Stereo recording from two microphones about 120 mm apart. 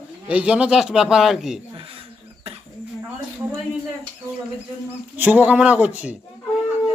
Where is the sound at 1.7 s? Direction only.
50° right (ahead or behind).